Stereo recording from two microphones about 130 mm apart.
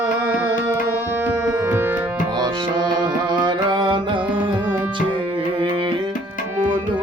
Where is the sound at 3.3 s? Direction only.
35° right (ahead or behind).